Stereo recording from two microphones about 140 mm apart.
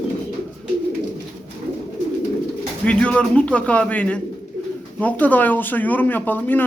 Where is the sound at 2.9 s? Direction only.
10° left (ahead or behind).